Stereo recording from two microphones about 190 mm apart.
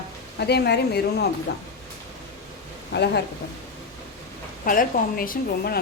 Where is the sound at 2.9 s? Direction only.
60° left (ahead or behind).